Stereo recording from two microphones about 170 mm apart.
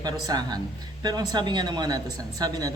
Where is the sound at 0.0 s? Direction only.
25° right (ahead or behind).